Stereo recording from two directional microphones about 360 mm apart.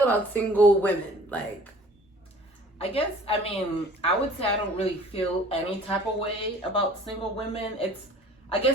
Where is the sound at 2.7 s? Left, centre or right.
Centre.